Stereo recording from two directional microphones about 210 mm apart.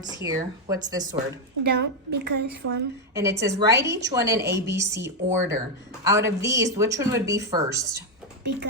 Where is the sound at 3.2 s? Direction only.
15° right (ahead or behind).